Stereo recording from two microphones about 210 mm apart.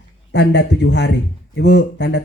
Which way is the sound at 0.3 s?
50° left (ahead or behind).